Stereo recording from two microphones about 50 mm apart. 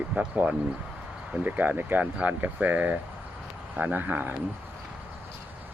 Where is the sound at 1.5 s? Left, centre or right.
Right.